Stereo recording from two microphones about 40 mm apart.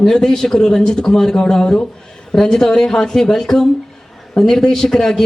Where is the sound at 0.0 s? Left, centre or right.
Centre.